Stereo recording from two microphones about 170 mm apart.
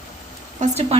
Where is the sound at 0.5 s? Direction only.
40° right (ahead or behind).